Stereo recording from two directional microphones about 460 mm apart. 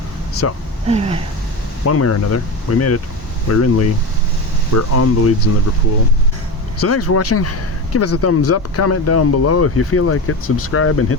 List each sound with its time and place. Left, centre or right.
0.4 s speech: left
0.9 s a sound: centre
1.8 s speech: left
6.7 s speech: left